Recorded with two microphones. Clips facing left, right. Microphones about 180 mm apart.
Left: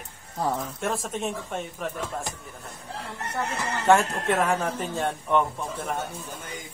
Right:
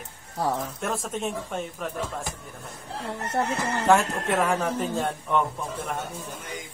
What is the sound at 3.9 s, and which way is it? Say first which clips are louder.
Speech: left 1 dB; centre (ahead or behind).